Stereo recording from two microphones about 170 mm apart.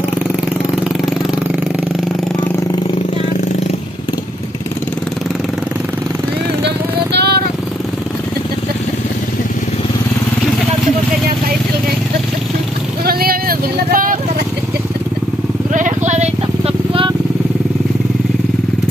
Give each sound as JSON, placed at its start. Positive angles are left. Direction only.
{"t": 6.6, "sound": "vehicle", "side_deg": -80}
{"t": 13.0, "sound": "vehicle", "side_deg": -60}
{"t": 15.7, "sound": "vehicle", "side_deg": -45}